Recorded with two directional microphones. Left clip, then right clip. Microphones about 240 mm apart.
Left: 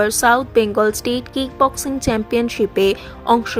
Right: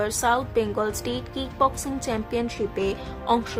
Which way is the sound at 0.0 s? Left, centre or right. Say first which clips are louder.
Left 8 dB; left.